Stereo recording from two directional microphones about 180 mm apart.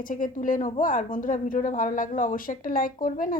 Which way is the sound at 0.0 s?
45° left (ahead or behind).